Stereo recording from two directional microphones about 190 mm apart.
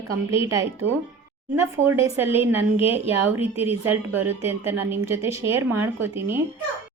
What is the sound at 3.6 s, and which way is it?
Speech, 10° right (ahead or behind).